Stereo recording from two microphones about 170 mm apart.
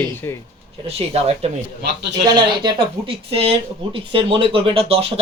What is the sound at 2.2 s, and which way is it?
Speech, 25° right (ahead or behind).